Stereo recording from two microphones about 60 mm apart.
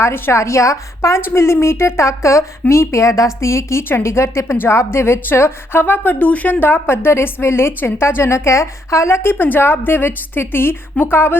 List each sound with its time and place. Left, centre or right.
0.0 s a woman's voice: left
1.2 s a woman's voice: left
9.3 s a woman's voice: left